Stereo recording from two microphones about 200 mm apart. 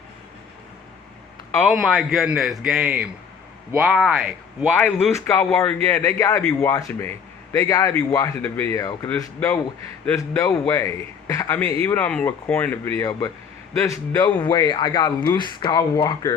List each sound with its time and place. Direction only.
1.5 s a man's voice: 5° left (ahead or behind); by 16.3 s 20° left (ahead or behind)